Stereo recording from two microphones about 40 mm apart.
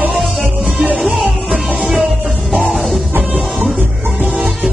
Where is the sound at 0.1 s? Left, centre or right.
Centre.